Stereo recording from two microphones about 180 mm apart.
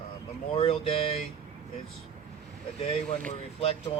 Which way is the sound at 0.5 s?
35° left (ahead or behind).